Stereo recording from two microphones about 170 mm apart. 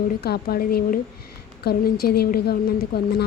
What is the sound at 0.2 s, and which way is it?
A woman's voice, 65° left (ahead or behind).